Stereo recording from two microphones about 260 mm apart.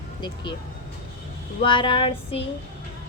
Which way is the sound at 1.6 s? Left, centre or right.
Centre.